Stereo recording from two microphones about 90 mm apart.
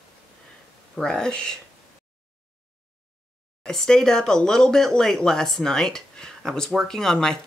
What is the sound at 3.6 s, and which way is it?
Speech, 5° left (ahead or behind).